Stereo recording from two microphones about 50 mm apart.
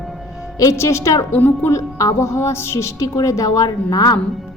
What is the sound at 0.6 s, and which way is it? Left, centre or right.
Speech, left.